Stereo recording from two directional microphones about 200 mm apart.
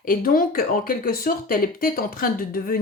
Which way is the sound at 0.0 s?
45° left (ahead or behind).